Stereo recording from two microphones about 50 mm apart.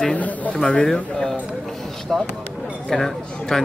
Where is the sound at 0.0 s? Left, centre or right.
Left.